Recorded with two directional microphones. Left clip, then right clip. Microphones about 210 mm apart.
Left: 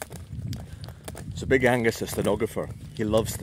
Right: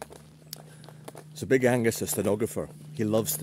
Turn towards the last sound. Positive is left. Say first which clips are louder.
# left 3 dB
turn(degrees=-15)  # may be behind; listen again after turning